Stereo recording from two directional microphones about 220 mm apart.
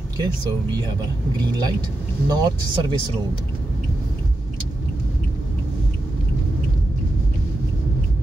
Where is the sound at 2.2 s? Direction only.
20° right (ahead or behind).